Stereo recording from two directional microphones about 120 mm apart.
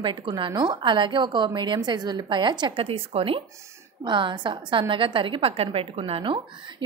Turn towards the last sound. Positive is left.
turn(degrees=-40)  # may be behind; listen again after turning